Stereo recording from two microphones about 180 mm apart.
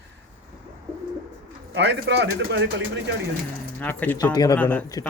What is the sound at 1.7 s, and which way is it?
Speech, 70° right (ahead or behind).